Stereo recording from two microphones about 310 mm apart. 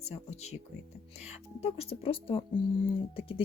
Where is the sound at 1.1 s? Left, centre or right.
Left.